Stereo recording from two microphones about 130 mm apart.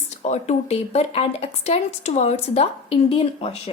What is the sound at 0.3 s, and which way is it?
A woman's voice, 55° left (ahead or behind).